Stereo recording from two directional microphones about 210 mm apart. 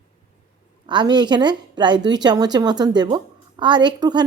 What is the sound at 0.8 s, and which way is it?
A woman's voice, 20° right (ahead or behind).